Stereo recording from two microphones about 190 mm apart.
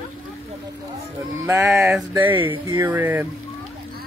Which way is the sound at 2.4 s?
25° right (ahead or behind).